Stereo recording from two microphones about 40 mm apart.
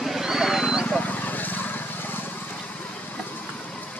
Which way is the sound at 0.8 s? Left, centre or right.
Left.